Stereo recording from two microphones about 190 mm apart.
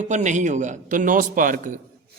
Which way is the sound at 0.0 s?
40° right (ahead or behind).